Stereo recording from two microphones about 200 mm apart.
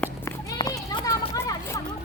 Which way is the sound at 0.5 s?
20° left (ahead or behind).